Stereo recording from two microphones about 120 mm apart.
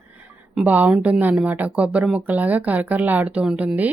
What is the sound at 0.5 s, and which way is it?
Speech, 15° right (ahead or behind).